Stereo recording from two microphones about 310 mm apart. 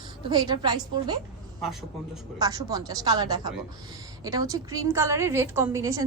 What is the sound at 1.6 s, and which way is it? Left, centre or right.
Speech, centre.